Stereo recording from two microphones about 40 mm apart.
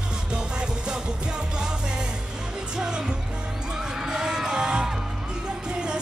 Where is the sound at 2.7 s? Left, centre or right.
Centre.